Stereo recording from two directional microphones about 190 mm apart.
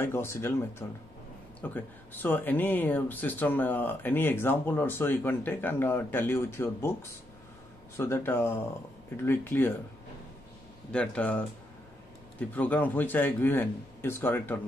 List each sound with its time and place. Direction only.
0.0 s speech: 15° left (ahead or behind)
10.9 s speech: 5° left (ahead or behind)